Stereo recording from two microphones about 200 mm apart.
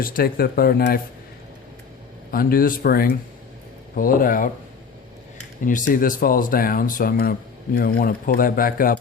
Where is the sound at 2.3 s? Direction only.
45° left (ahead or behind).